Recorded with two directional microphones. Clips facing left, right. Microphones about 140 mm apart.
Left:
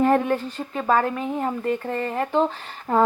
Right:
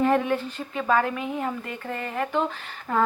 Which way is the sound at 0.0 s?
40° left (ahead or behind).